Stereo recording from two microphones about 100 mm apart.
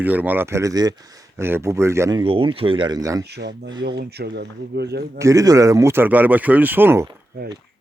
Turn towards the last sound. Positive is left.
turn(degrees=-25)  # may be behind; listen again after turning